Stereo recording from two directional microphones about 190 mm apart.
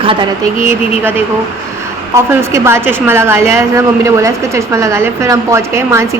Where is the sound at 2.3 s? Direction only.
15° right (ahead or behind).